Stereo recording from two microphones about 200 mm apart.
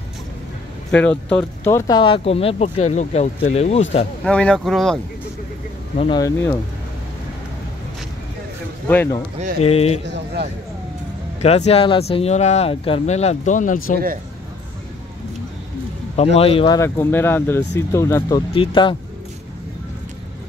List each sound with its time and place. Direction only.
0.9 s speech: 5° left (ahead or behind); by 3.8 s 35° left (ahead or behind)
4.2 s speech: 5° left (ahead or behind)
5.9 s speech: 20° left (ahead or behind)
8.8 s speech: 10° left (ahead or behind)
9.6 s speech: 30° left (ahead or behind)
10.0 s a man's voice: 60° right (ahead or behind)
11.4 s speech: 30° left (ahead or behind)
16.3 s speech: 25° left (ahead or behind)
18.5 s speech: 25° left (ahead or behind)